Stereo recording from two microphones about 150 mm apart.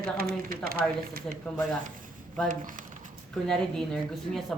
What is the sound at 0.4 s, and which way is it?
Speech, 75° right (ahead or behind).